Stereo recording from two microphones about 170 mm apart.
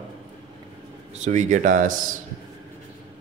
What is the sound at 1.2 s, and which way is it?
Speech, 45° right (ahead or behind).